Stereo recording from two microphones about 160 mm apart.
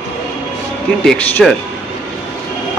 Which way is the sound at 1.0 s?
5° left (ahead or behind).